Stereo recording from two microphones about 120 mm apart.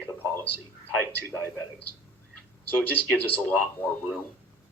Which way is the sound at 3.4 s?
15° left (ahead or behind).